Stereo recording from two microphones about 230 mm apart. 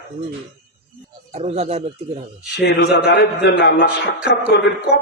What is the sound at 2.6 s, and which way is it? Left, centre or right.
A man's voice, left.